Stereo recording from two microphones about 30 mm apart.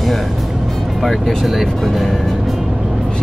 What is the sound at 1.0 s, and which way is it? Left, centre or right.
Speech, centre.